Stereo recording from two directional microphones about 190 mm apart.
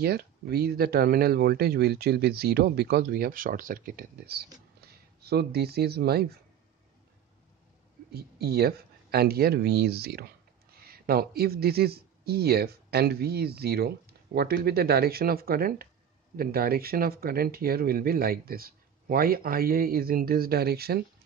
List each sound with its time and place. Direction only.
0.0 s speech: 55° right (ahead or behind)
8.1 s speech: 55° right (ahead or behind)